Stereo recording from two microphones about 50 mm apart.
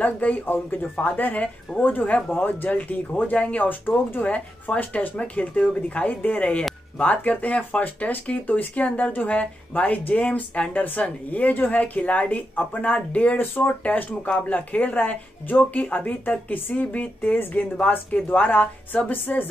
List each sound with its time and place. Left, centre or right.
0.0 s speech: left
4.3 s speech: left
13.4 s speech: left
13.8 s speech: left